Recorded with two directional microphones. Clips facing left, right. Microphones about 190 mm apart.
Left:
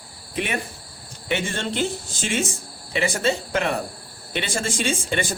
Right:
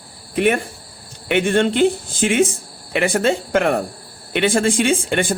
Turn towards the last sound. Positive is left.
turn(degrees=-55)  # may be behind; listen again after turning